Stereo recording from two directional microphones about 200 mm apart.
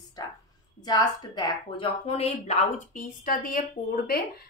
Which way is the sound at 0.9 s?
20° left (ahead or behind).